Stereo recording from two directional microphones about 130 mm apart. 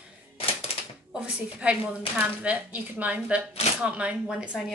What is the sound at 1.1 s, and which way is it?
A woman's voice, 10° right (ahead or behind).